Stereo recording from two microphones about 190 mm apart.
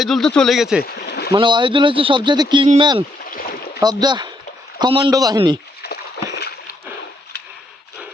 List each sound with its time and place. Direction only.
0.0 s speech: centre (ahead or behind)
0.8 s a sound: 55° left (ahead or behind)
1.3 s speech: 25° right (ahead or behind)
3.2 s rowboat: 50° left (ahead or behind)
3.8 s speech: 20° right (ahead or behind)
6.3 s splash: 60° left (ahead or behind)